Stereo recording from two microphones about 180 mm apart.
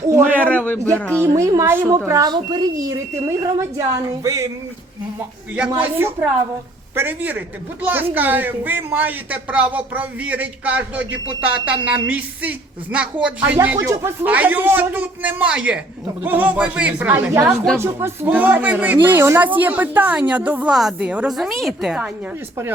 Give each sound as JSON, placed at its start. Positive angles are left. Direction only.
{"t": 0.1, "sound": "a woman's voice", "side_deg": -10}
{"t": 0.4, "sound": "speech", "side_deg": 10}
{"t": 1.3, "sound": "a woman's voice", "side_deg": -15}
{"t": 5.5, "sound": "a woman's voice", "side_deg": -10}